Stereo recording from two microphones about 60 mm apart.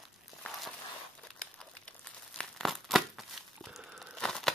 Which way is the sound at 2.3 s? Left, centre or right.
Centre.